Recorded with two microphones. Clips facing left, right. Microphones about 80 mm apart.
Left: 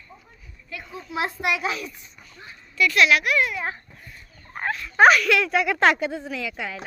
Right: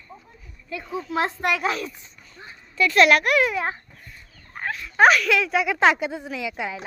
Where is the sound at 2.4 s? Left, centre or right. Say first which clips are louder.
Even; right.